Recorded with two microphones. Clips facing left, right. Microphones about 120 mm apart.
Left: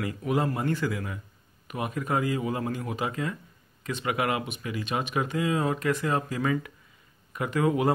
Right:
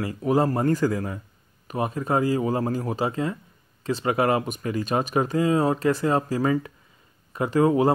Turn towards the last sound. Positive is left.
turn(degrees=-30)  # may be behind; listen again after turning